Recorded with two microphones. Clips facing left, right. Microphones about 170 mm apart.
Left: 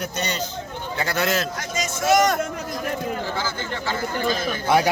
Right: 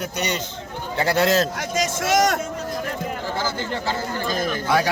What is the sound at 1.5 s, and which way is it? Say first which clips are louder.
Speech: right 4 dB; 90° right.